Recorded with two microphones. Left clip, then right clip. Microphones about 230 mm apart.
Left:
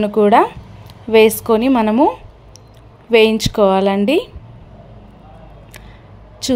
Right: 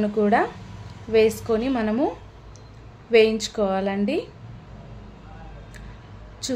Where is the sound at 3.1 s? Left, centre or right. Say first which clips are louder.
Left 6 dB; left.